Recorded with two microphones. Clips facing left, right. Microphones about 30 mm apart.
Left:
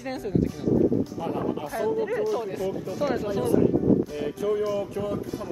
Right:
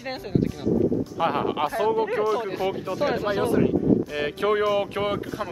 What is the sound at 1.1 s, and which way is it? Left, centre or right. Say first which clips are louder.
Speech: right 5 dB; right.